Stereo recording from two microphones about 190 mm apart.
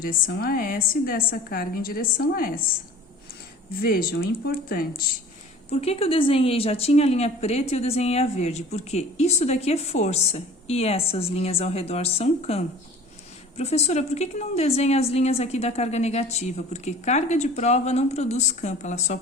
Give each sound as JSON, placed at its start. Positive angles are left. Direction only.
{"t": 0.0, "sound": "a woman's voice", "side_deg": 50}
{"t": 3.8, "sound": "a woman's voice", "side_deg": 50}
{"t": 5.7, "sound": "a woman's voice", "side_deg": 30}